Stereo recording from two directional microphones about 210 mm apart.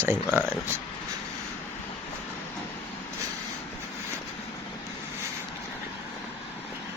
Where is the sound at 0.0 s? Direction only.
10° right (ahead or behind).